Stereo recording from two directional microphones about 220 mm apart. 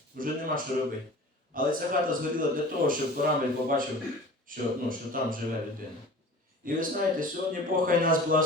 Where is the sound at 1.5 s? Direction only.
40° right (ahead or behind).